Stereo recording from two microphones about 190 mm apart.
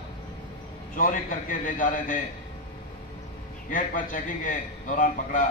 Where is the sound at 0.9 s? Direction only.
45° left (ahead or behind).